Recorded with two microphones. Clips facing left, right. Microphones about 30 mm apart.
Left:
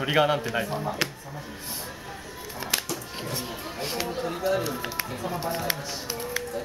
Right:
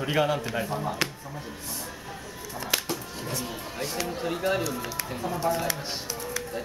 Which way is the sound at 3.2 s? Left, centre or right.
Left.